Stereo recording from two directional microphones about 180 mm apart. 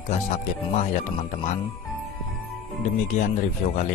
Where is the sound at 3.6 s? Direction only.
40° left (ahead or behind).